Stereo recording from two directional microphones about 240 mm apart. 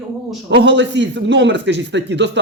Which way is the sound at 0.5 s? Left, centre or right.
Right.